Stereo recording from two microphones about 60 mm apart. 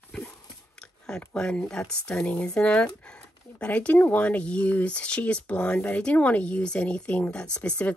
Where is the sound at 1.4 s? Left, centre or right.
Centre.